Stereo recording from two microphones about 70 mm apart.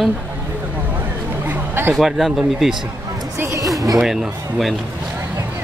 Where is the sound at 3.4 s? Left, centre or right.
Right.